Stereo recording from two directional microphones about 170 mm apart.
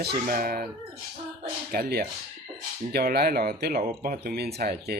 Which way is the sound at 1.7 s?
65° right (ahead or behind).